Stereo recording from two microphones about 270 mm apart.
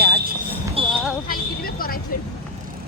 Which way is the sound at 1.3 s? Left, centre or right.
Left.